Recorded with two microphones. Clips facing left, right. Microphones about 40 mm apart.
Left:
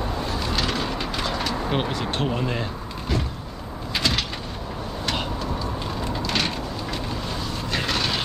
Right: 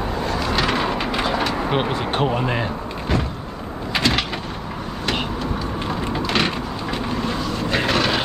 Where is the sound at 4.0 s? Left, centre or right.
Right.